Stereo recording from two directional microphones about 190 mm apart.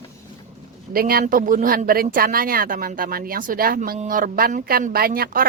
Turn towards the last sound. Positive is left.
turn(degrees=-50)  # may be behind; listen again after turning